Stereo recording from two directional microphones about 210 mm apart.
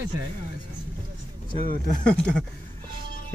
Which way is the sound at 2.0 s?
5° left (ahead or behind).